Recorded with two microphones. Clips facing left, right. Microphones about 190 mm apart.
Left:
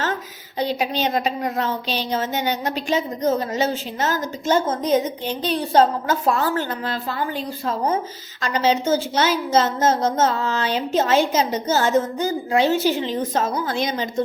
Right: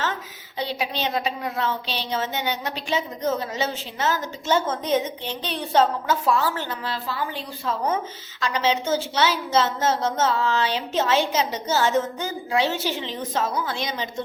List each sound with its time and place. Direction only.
0.6 s a woman's voice: 45° left (ahead or behind)